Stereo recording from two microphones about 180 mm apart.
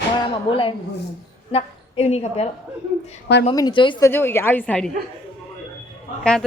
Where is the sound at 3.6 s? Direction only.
25° left (ahead or behind).